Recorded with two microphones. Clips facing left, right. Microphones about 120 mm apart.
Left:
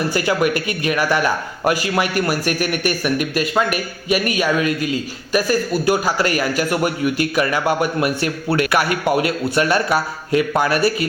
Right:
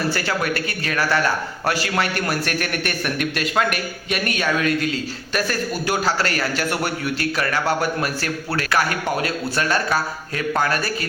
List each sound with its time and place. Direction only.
0.1 s a man's voice: 15° left (ahead or behind)
8.0 s a man's voice: 20° left (ahead or behind)